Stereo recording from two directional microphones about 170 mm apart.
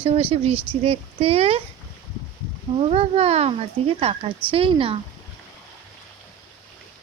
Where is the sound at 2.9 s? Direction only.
35° right (ahead or behind).